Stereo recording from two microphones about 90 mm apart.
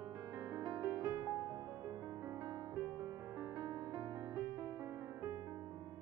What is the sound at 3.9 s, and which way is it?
Music, 50° right (ahead or behind).